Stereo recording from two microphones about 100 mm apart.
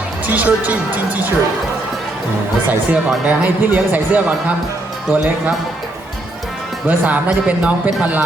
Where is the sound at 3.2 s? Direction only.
15° right (ahead or behind).